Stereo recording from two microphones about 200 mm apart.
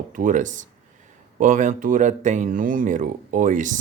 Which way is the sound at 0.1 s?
40° right (ahead or behind).